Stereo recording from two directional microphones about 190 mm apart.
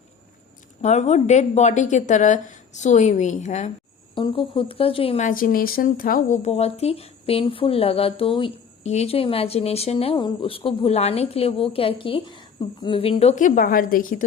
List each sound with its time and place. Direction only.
0.8 s speech: 35° left (ahead or behind)
4.1 s speech: 25° left (ahead or behind); by 14.3 s 50° left (ahead or behind)